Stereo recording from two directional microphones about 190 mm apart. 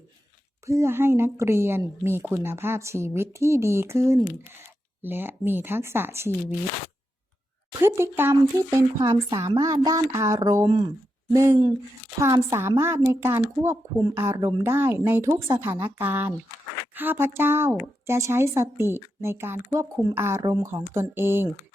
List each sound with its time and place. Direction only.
0.6 s a woman's voice: 15° right (ahead or behind)
7.8 s a woman's voice: 15° right (ahead or behind)